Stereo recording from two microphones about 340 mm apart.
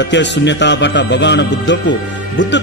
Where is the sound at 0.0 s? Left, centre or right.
Left.